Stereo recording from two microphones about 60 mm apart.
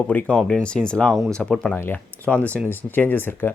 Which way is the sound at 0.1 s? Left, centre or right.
Left.